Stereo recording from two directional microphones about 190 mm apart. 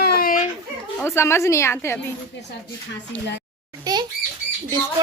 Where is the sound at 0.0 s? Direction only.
55° left (ahead or behind).